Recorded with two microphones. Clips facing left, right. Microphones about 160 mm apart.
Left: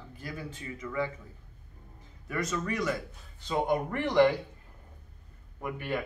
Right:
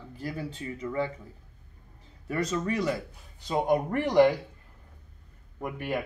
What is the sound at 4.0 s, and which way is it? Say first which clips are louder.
Speech: right 2 dB; 15° right (ahead or behind).